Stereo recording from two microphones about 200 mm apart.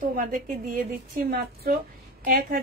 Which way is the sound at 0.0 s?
45° right (ahead or behind).